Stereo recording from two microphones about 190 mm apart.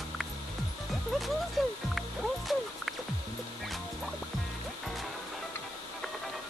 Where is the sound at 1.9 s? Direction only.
Centre (ahead or behind).